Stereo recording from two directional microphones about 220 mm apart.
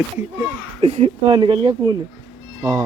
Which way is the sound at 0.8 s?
25° right (ahead or behind).